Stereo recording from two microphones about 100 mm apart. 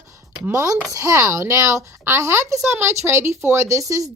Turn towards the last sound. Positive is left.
turn(degrees=-30)  # may be behind; listen again after turning